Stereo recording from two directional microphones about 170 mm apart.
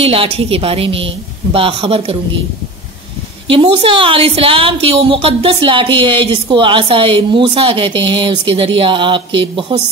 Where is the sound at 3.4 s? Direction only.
30° right (ahead or behind).